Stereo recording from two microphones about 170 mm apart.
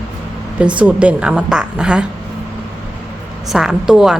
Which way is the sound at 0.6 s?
5° right (ahead or behind).